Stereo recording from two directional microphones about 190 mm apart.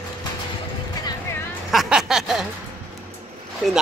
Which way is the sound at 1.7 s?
Centre (ahead or behind).